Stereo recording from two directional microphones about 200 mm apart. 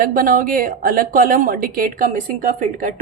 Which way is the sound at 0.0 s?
45° right (ahead or behind).